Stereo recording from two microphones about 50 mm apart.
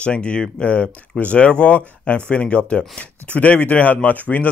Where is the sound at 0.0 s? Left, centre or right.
Left.